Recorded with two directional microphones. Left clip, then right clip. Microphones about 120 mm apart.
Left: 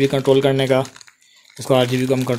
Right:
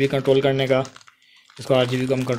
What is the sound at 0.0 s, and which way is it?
Speech, 30° left (ahead or behind).